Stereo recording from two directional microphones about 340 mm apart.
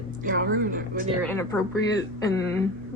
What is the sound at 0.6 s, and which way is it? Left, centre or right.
Speech, right.